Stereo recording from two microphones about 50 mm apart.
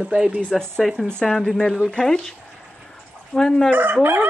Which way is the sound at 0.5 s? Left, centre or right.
Centre.